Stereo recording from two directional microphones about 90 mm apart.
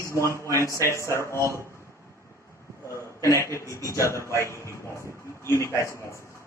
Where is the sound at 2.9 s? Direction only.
35° left (ahead or behind).